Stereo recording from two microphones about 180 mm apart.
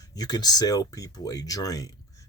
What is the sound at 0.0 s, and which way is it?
Speech, 20° left (ahead or behind).